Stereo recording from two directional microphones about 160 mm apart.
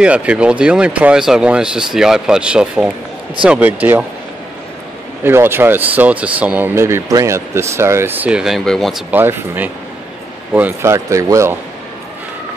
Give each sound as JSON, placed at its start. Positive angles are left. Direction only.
{"t": 0.0, "sound": "speech", "side_deg": -10}
{"t": 5.2, "sound": "speech", "side_deg": -15}
{"t": 9.1, "sound": "speech", "side_deg": -10}